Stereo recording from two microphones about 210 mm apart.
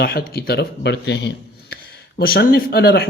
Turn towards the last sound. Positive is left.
turn(degrees=50)  # may be behind; listen again after turning